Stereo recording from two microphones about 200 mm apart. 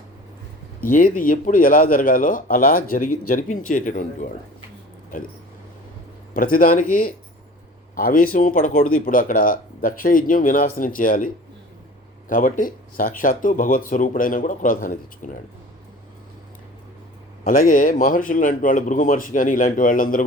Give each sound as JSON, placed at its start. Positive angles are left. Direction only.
{"t": 0.8, "sound": "a man's voice", "side_deg": 40}
{"t": 6.3, "sound": "a man's voice", "side_deg": 45}
{"t": 12.3, "sound": "speech", "side_deg": 40}
{"t": 17.4, "sound": "speech", "side_deg": 40}